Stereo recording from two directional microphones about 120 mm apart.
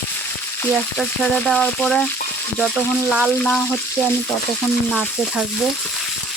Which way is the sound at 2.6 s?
5° right (ahead or behind).